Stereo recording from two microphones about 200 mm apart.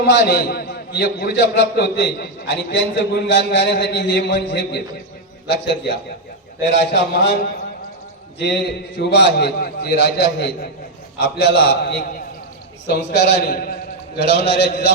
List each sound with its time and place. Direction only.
0.0 s a man's voice: 55° left (ahead or behind)
8.4 s a man's voice: 55° left (ahead or behind)